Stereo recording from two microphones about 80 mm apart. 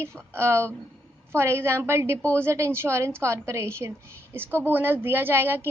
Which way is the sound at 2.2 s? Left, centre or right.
Centre.